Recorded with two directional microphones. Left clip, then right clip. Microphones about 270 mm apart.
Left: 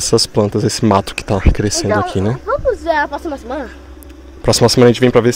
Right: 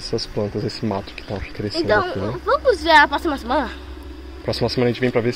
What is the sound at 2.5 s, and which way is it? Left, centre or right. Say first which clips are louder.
Speech: right 2 dB; right.